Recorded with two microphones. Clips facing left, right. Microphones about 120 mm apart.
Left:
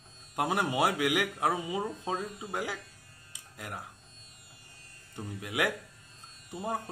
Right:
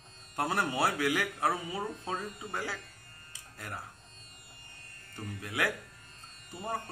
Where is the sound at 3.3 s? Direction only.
15° left (ahead or behind).